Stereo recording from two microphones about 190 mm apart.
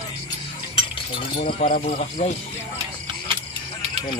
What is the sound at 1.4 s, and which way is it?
Speech, 40° left (ahead or behind).